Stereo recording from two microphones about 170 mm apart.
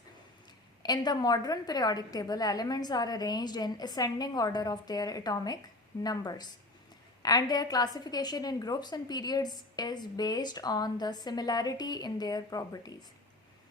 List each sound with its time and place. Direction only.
0.8 s a woman's voice: 25° left (ahead or behind)